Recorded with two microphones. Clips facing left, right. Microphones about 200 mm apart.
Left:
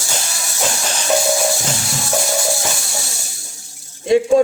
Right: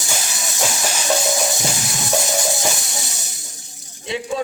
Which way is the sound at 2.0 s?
20° right (ahead or behind).